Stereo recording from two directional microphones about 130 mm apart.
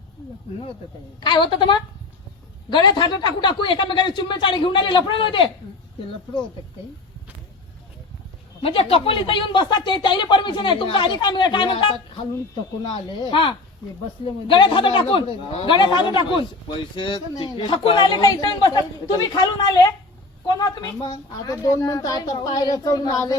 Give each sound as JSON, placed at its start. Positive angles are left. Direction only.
{"t": 1.2, "sound": "speech", "side_deg": 35}
{"t": 8.6, "sound": "speech", "side_deg": 45}
{"t": 13.3, "sound": "a woman's voice", "side_deg": 40}